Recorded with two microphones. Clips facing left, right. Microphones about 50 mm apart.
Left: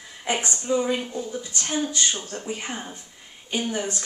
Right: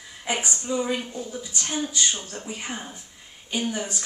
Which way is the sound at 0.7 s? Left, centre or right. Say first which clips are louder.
Left 3 dB; centre.